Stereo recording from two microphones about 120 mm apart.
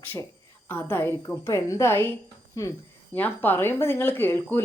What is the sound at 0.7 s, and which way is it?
A woman's voice, 20° left (ahead or behind).